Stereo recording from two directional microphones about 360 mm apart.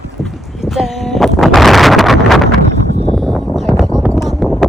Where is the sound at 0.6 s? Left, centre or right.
Centre.